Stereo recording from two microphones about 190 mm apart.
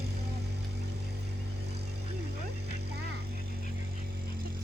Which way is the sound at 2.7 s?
60° right (ahead or behind).